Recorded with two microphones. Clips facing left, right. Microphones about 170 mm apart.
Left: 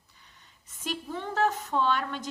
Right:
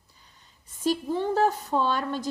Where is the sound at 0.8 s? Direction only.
35° right (ahead or behind).